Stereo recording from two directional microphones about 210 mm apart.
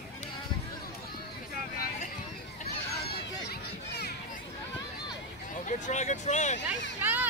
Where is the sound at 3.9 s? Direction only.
50° left (ahead or behind).